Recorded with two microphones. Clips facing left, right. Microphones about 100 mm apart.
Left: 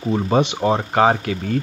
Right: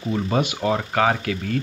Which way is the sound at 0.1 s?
25° left (ahead or behind).